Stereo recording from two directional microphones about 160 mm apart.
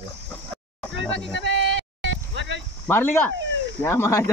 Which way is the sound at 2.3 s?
90° right.